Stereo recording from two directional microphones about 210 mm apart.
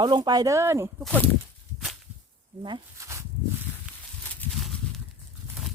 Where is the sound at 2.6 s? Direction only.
20° right (ahead or behind).